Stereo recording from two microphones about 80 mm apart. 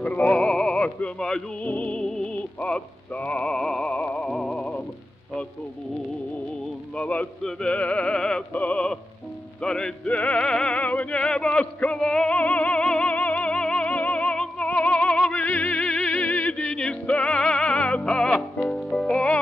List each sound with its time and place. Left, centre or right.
0.0 s music: centre
7.0 s a man's voice: centre
7.4 s music: centre
10.4 s yodeling: centre
15.4 s music: centre